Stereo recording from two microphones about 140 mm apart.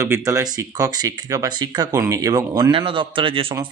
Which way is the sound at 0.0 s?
20° right (ahead or behind).